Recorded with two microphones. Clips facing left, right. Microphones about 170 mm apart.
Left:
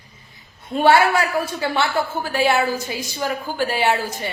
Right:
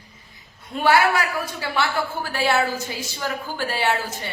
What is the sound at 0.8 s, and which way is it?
Speech, 25° left (ahead or behind).